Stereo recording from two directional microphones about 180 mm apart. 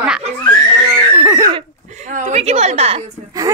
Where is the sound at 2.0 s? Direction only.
40° right (ahead or behind).